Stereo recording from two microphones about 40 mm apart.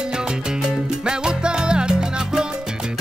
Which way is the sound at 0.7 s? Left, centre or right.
Right.